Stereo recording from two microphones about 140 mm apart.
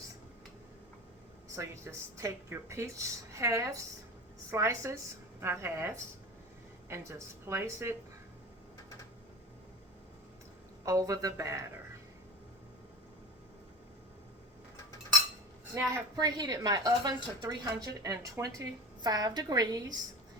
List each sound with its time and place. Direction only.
1.5 s a woman's voice: 20° right (ahead or behind)
10.8 s a woman's voice: 25° right (ahead or behind)
16.1 s a woman's voice: 30° right (ahead or behind)